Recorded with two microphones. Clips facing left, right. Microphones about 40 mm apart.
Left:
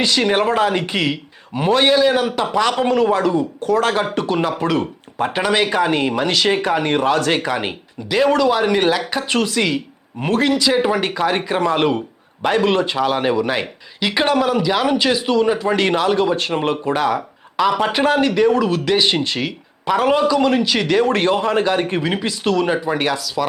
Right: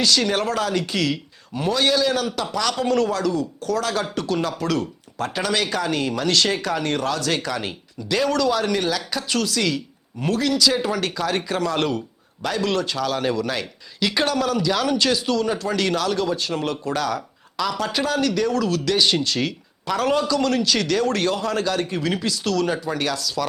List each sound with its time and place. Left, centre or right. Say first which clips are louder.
0.0 s speech: left 4 dB; left